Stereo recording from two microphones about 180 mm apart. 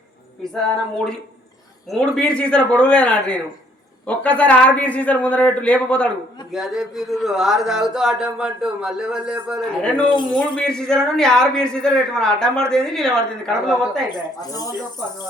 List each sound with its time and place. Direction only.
1.9 s a man's voice: 5° left (ahead or behind)
14.1 s speech: 20° left (ahead or behind)